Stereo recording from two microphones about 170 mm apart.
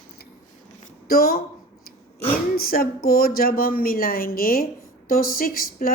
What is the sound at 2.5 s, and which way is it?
Speech, 60° left (ahead or behind).